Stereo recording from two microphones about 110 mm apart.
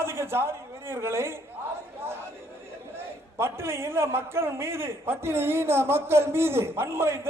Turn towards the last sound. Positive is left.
turn(degrees=-25)  # may be behind; listen again after turning